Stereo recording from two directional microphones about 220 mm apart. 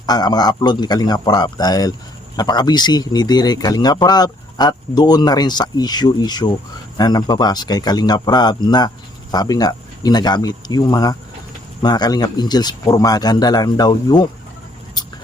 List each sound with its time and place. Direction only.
0.0 s a man's voice: 20° left (ahead or behind)